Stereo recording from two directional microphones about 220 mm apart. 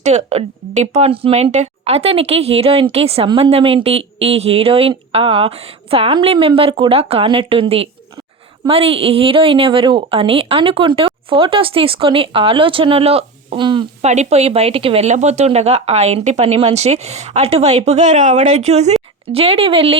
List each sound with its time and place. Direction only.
0.0 s a woman's voice: 30° right (ahead or behind)